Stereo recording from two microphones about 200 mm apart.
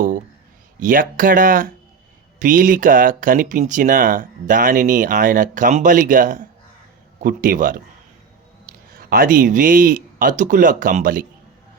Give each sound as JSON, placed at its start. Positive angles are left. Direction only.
{"t": 0.8, "sound": "speech", "side_deg": -45}
{"t": 9.0, "sound": "speech", "side_deg": -45}